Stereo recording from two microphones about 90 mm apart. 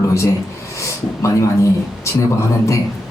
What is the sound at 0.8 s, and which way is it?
Speech, 35° left (ahead or behind).